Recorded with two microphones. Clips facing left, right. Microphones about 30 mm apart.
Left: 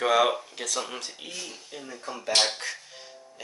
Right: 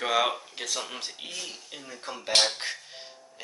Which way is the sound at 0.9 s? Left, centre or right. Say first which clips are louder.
Even; centre.